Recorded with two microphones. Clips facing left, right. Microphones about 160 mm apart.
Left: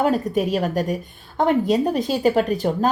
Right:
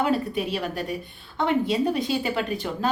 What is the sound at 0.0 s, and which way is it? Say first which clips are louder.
A woman's voice: left 4 dB; 45° left (ahead or behind).